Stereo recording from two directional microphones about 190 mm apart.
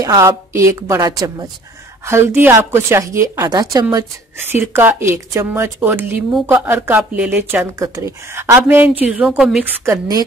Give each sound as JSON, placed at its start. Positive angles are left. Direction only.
{"t": 0.0, "sound": "a woman's voice", "side_deg": -20}
{"t": 9.8, "sound": "speech", "side_deg": -20}